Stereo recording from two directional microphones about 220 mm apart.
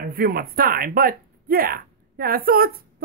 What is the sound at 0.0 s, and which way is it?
Speech, 45° right (ahead or behind).